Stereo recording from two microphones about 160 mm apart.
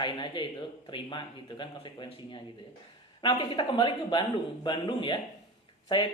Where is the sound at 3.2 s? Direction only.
30° left (ahead or behind).